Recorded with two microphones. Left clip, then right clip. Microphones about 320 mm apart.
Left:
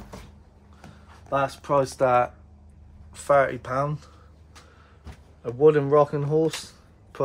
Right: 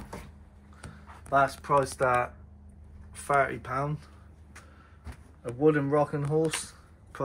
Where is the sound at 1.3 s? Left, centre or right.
Left.